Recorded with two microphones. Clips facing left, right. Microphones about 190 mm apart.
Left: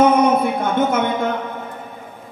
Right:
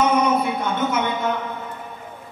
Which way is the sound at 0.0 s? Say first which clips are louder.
Left 5 dB; 50° left (ahead or behind).